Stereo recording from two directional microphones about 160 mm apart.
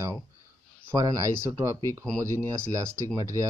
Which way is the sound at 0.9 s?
20° right (ahead or behind).